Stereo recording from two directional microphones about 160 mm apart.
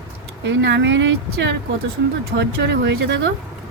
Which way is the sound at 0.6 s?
90° right.